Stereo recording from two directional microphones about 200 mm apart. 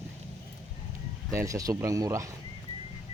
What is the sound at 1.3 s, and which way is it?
Speech, 15° right (ahead or behind).